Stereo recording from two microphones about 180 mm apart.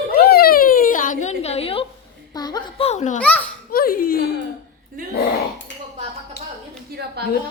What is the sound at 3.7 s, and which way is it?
Speech, 55° left (ahead or behind).